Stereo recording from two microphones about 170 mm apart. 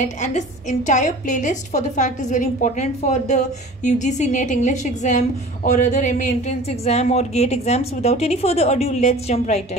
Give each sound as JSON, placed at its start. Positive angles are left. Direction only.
{"t": 0.2, "sound": "a woman's voice", "side_deg": 45}